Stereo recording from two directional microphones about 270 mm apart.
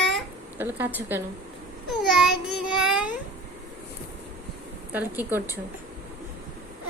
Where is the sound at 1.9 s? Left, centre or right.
Centre.